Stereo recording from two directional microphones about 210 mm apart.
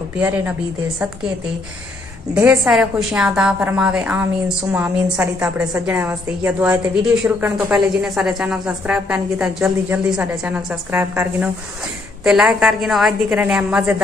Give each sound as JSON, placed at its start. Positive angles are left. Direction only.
{"t": 2.3, "sound": "a woman's voice", "side_deg": -5}